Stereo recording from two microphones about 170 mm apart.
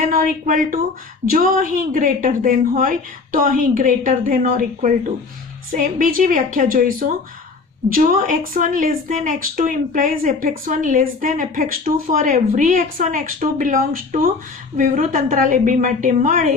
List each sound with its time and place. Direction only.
0.0 s a woman's voice: 55° right (ahead or behind)